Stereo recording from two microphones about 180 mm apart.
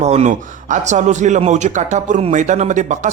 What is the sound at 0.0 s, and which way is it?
A man's voice, 35° right (ahead or behind).